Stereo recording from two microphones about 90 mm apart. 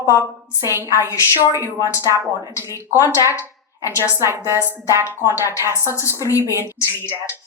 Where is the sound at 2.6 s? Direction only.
35° left (ahead or behind).